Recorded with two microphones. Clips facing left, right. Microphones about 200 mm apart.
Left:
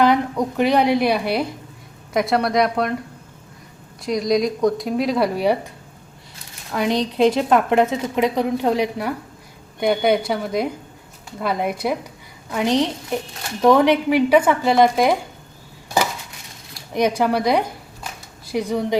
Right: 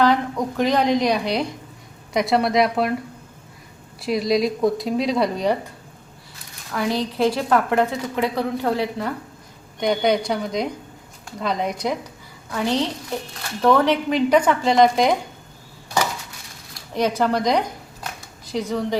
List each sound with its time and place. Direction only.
0.0 s a woman's voice: 15° left (ahead or behind); by 2.9 s centre (ahead or behind)
4.0 s speech: 5° right (ahead or behind)
6.7 s a woman's voice: 20° left (ahead or behind)
12.5 s a woman's voice: 15° left (ahead or behind)
16.9 s a woman's voice: 15° left (ahead or behind)
18.7 s a woman's voice: 15° left (ahead or behind)